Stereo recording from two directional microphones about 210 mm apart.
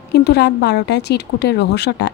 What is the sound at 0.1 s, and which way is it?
A woman's voice, 50° left (ahead or behind).